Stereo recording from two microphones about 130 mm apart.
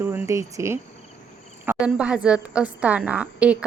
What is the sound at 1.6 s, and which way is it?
A woman's voice, 10° right (ahead or behind).